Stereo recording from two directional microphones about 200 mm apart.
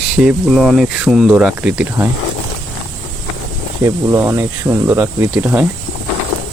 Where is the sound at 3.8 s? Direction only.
15° right (ahead or behind).